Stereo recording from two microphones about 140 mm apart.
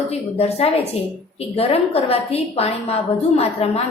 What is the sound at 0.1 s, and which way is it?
A woman's voice, 45° left (ahead or behind).